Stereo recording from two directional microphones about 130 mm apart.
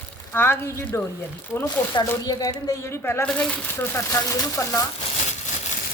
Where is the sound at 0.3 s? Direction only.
15° left (ahead or behind).